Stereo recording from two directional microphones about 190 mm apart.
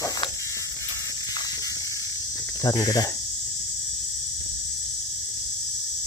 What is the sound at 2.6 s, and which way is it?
Speech, 20° left (ahead or behind).